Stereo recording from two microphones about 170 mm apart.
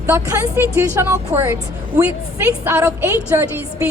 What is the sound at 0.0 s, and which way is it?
Speech, 15° right (ahead or behind).